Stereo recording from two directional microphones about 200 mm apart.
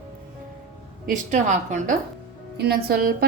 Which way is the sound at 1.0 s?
40° right (ahead or behind).